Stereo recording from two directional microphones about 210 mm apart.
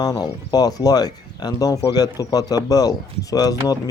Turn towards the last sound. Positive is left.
turn(degrees=15)  # may be behind; listen again after turning